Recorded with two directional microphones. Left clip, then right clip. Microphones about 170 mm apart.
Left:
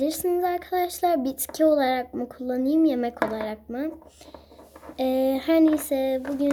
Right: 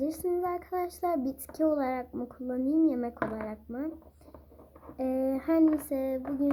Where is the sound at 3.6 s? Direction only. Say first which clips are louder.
Left 6 dB; 25° left (ahead or behind).